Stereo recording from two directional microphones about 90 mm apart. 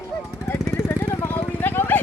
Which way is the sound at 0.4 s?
25° left (ahead or behind).